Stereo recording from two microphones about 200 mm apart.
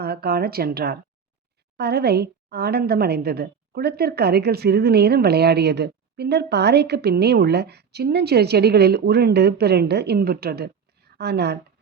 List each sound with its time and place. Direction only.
0.0 s a woman's voice: 50° right (ahead or behind)